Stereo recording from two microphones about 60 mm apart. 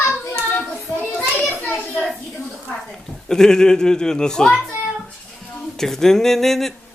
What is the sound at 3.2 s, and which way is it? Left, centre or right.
Speech, centre.